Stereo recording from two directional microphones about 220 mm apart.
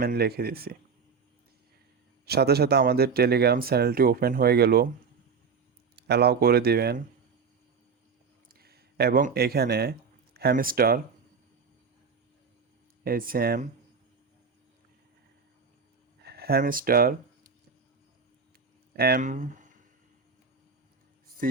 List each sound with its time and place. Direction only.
0.0 s speech: 45° right (ahead or behind)
2.2 s speech: 45° right (ahead or behind)
6.0 s speech: 50° right (ahead or behind)
8.4 s speech: 45° right (ahead or behind)
13.1 s speech: 40° right (ahead or behind)
16.2 s speech: 45° right (ahead or behind)
18.9 s speech: 45° right (ahead or behind)